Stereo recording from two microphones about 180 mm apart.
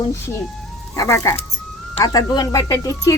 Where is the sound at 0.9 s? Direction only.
15° left (ahead or behind).